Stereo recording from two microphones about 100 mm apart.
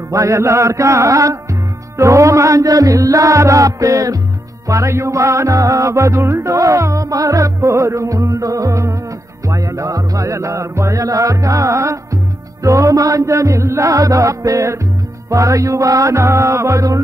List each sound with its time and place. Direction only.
0.1 s music: 30° right (ahead or behind)